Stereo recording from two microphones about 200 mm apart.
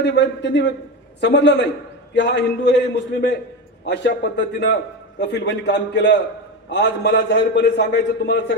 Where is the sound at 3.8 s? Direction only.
60° left (ahead or behind).